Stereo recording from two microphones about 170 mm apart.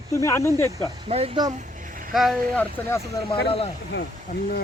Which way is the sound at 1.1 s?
35° right (ahead or behind).